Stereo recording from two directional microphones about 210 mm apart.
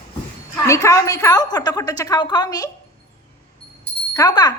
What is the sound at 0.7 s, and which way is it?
A woman's voice, 15° left (ahead or behind).